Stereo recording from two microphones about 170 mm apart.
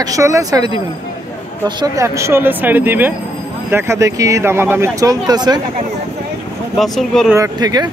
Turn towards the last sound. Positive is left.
turn(degrees=-25)  # may be behind; listen again after turning